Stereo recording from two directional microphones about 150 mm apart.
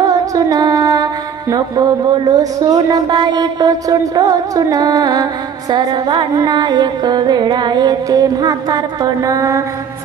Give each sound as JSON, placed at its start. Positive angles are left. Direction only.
{"t": 0.0, "sound": "music", "side_deg": -25}